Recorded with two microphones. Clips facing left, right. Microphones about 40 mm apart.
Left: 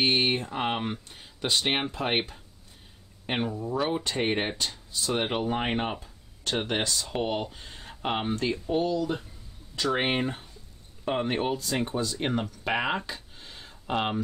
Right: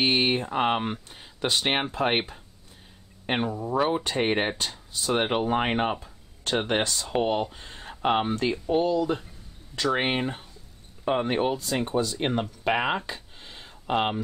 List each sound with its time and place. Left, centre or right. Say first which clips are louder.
0.0 s speech: right 1 dB; centre
3.5 s speech: right 3 dB; right
5.9 s a sound: right 1 dB; right
6.8 s speech: right 2 dB; right
7.1 s speech: right 4 dB; centre
13.1 s a sound: right 2 dB; right